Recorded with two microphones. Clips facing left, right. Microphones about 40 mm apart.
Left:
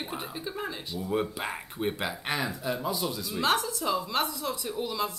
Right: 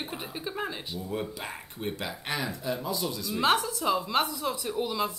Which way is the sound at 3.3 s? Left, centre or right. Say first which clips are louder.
Right 2 dB; centre.